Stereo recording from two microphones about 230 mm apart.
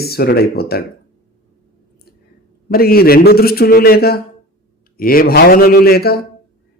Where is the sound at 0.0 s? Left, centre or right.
Left.